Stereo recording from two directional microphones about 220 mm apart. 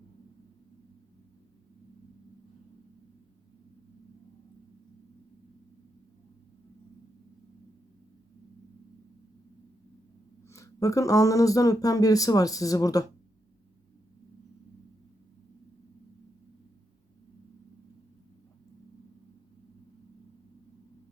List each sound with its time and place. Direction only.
10.5 s speech: 15° left (ahead or behind)